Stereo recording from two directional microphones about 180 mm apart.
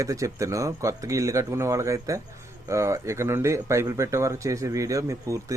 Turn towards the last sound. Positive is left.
turn(degrees=-15)  # may be behind; listen again after turning